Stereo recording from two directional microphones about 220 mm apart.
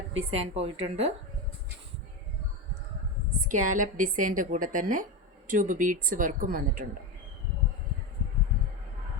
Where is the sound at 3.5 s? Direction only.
35° right (ahead or behind).